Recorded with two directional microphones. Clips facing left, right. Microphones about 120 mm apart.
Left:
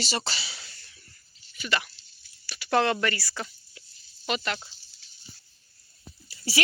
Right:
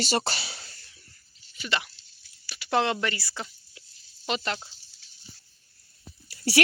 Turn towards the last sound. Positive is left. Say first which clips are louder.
# right 6 dB
turn(degrees=-65)  # may be behind; listen again after turning